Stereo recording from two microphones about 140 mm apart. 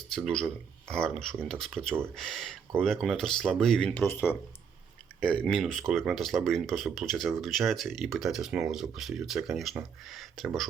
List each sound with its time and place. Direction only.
0.3 s speech: 5° left (ahead or behind)
4.0 s speech: 15° left (ahead or behind)